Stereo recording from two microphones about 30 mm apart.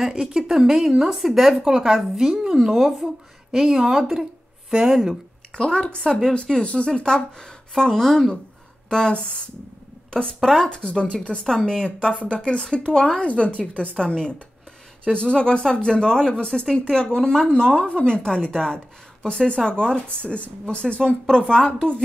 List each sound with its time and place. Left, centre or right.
0.2 s a woman's voice: centre
1.7 s a woman's voice: right
2.7 s speech: centre
3.5 s speech: centre
5.6 s speech: left
6.4 s speech: left
6.9 s speech: left
8.8 s speech: left
10.7 s speech: left
11.5 s speech: centre
13.2 s a woman's voice: left
13.9 s speech: left
20.6 s speech: left